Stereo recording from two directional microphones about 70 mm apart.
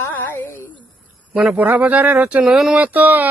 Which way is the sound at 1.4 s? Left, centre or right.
Centre.